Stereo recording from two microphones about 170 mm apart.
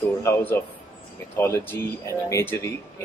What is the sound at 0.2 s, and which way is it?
A man's voice, 15° left (ahead or behind).